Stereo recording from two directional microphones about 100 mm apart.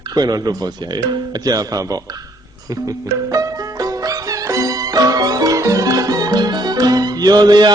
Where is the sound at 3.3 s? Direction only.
40° right (ahead or behind).